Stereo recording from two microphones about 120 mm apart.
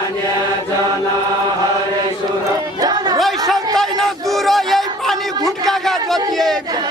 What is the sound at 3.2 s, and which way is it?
Chatter, centre (ahead or behind).